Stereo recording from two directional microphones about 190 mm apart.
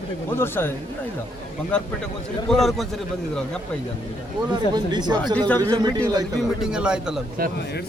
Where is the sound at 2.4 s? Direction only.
Centre (ahead or behind).